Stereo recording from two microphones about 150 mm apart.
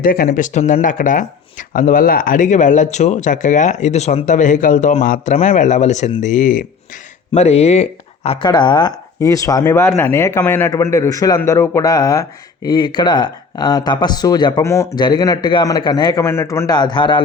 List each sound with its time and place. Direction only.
0.0 s speech: 75° left (ahead or behind)
7.3 s speech: 45° left (ahead or behind)